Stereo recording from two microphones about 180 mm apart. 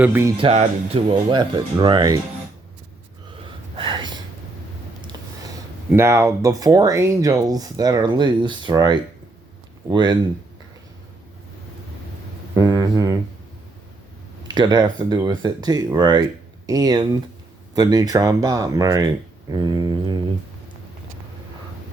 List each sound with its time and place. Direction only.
0.0 s speech: 15° right (ahead or behind)
0.3 s speech: 35° right (ahead or behind)
3.8 s gasp: 25° right (ahead or behind)
5.9 s speech: 15° right (ahead or behind)
12.5 s a sound: 20° right (ahead or behind)
14.4 s speech: 25° right (ahead or behind)